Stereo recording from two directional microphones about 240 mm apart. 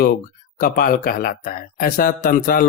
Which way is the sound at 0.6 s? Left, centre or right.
Left.